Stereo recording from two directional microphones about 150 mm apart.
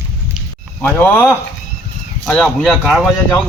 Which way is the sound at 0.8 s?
15° left (ahead or behind).